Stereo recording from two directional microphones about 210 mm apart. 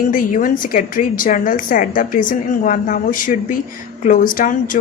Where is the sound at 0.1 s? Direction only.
40° left (ahead or behind).